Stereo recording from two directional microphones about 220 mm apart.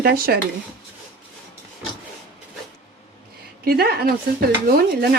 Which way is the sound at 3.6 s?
45° right (ahead or behind).